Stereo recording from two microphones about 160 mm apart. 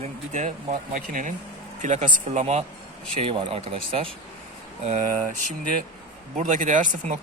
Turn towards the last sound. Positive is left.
turn(degrees=-55)  # may be behind; listen again after turning